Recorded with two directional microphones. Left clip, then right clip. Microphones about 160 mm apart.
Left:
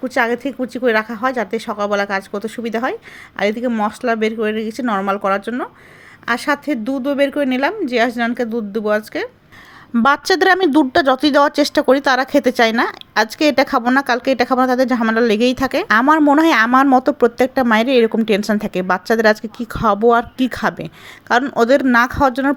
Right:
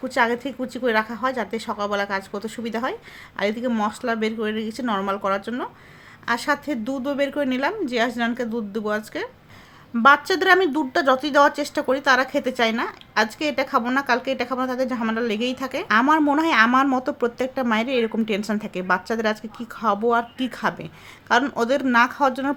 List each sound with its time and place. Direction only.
0.0 s speech: 30° left (ahead or behind)
10.0 s a woman's voice: 45° left (ahead or behind)